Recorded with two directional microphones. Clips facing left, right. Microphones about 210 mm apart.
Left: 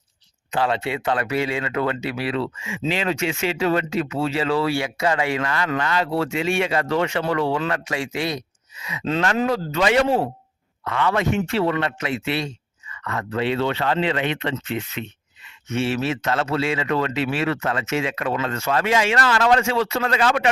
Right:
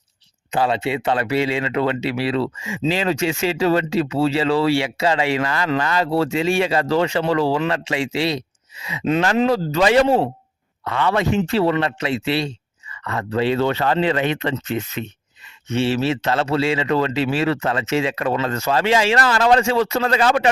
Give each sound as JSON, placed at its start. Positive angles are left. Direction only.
{"t": 0.5, "sound": "a man's voice", "side_deg": -25}